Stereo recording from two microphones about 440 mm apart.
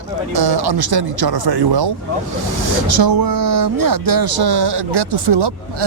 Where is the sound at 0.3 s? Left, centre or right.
Right.